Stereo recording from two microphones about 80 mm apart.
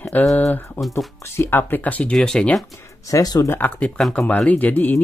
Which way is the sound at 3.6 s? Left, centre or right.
Centre.